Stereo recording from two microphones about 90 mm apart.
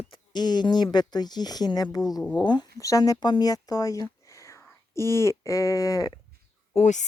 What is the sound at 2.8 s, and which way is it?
Speech, 40° left (ahead or behind).